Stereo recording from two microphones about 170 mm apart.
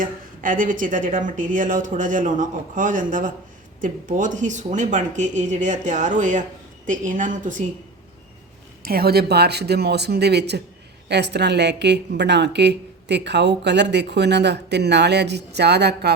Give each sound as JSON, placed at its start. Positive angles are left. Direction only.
{"t": 0.0, "sound": "speech", "side_deg": -55}
{"t": 8.8, "sound": "a woman's voice", "side_deg": -65}